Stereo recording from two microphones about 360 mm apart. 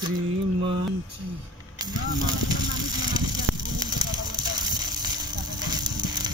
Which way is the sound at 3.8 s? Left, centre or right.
Centre.